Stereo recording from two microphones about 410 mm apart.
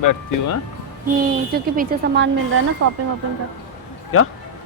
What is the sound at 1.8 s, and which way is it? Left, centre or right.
Speech, right.